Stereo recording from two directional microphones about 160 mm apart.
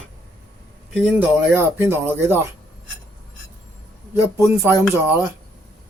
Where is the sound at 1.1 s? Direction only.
15° right (ahead or behind).